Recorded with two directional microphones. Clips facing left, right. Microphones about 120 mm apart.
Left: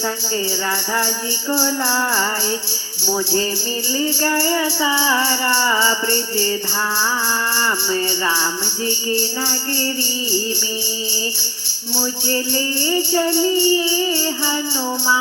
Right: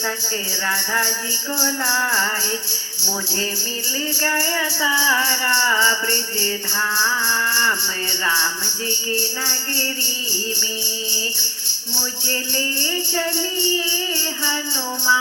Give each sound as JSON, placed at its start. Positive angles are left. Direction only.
{"t": 0.9, "sound": "music", "side_deg": 20}
{"t": 4.0, "sound": "music", "side_deg": 20}
{"t": 9.0, "sound": "music", "side_deg": 20}
{"t": 12.3, "sound": "music", "side_deg": 20}